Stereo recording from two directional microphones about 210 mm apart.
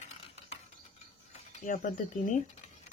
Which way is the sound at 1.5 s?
40° left (ahead or behind).